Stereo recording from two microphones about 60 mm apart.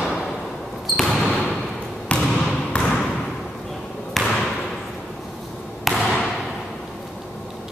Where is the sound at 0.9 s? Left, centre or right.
Centre.